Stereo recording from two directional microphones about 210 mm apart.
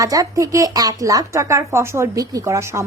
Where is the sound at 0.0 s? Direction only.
15° right (ahead or behind).